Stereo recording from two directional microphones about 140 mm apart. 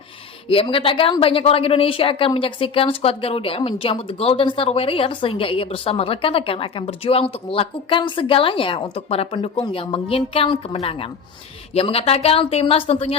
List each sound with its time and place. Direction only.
0.4 s a woman's voice: 40° left (ahead or behind)